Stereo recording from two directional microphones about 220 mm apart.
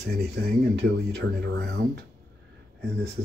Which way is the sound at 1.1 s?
45° right (ahead or behind).